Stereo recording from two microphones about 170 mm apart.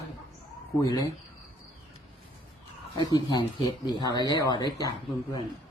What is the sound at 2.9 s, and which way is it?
Speech, 25° left (ahead or behind).